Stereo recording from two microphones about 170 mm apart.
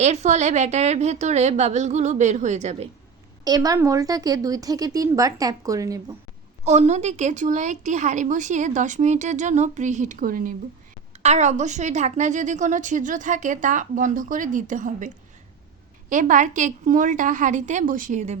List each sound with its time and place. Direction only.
0.0 s a woman's voice: 40° right (ahead or behind)
3.4 s a woman's voice: 20° right (ahead or behind)
6.7 s a woman's voice: 40° right (ahead or behind)
11.2 s a woman's voice: 40° right (ahead or behind)